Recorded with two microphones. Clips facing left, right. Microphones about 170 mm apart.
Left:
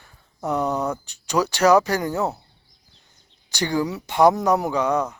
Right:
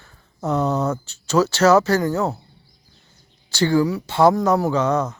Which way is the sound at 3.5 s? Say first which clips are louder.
Right 5 dB; 15° left (ahead or behind).